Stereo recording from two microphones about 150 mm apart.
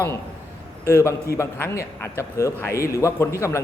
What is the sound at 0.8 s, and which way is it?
A man's voice, 20° left (ahead or behind).